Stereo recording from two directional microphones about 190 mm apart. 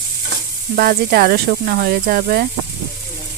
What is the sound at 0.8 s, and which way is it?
Speech, 50° right (ahead or behind).